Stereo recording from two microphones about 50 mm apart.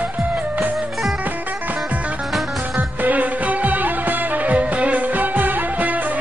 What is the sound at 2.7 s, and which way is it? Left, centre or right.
Music, right.